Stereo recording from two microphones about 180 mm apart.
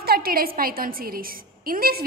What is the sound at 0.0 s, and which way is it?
A woman's voice, 55° right (ahead or behind).